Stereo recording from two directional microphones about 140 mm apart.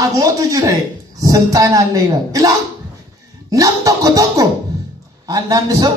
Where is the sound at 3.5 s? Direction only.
25° right (ahead or behind).